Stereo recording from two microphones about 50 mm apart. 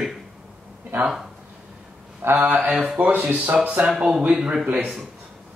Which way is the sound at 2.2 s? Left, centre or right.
Right.